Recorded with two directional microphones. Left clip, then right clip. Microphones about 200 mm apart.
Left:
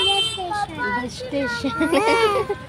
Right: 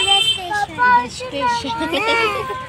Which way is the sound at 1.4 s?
45° left (ahead or behind).